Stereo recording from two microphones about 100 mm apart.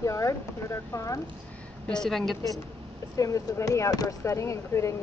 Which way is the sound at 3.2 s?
35° left (ahead or behind).